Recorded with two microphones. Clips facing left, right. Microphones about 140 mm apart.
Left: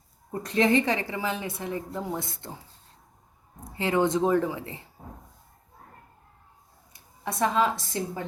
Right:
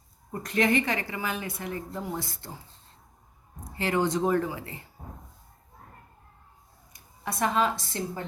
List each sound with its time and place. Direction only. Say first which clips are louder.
0.5 s a woman's voice: left 2 dB; 25° left (ahead or behind)
3.6 s a woman's voice: left 2 dB; 20° left (ahead or behind)
7.4 s a woman's voice: left 2 dB; 15° left (ahead or behind)